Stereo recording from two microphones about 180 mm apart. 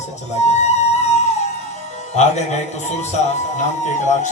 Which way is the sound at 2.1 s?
40° left (ahead or behind).